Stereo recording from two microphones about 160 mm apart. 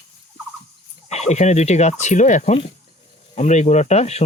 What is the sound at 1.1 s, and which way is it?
Speech, 45° left (ahead or behind).